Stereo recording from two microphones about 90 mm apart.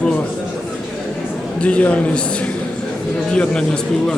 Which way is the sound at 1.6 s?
15° left (ahead or behind).